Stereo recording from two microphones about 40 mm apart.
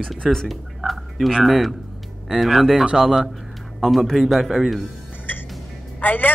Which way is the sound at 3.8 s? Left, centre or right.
Centre.